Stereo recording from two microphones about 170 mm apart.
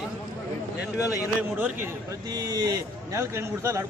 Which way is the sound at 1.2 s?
10° right (ahead or behind).